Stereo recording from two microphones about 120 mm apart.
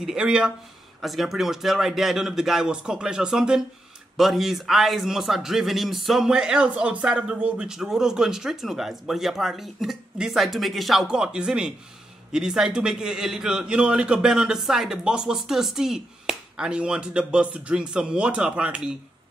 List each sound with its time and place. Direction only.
0.0 s speech: 5° right (ahead or behind)